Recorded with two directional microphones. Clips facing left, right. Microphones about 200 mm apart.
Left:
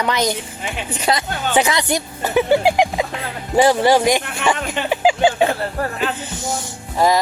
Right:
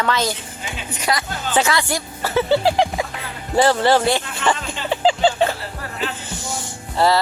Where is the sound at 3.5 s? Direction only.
15° left (ahead or behind).